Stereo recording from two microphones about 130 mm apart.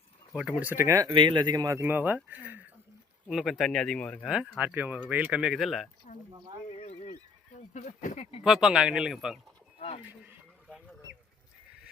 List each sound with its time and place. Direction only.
0.3 s speech: 10° right (ahead or behind)
1.1 s speech: 35° right (ahead or behind)
1.8 s speech: 15° right (ahead or behind)
3.2 s speech: centre (ahead or behind)
4.3 s speech: 10° right (ahead or behind)
6.7 s a sound: 60° left (ahead or behind)
7.7 s speech: 70° left (ahead or behind)
8.4 s speech: 5° right (ahead or behind)